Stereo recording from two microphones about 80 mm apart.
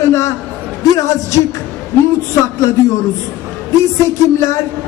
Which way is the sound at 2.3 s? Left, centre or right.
Left.